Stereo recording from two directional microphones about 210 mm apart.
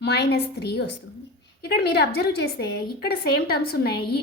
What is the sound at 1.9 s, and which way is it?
Speech, 50° left (ahead or behind).